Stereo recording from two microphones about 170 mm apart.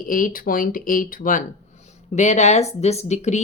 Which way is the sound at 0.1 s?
55° left (ahead or behind).